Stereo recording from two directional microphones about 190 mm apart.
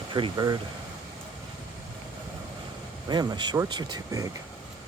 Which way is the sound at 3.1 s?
20° right (ahead or behind).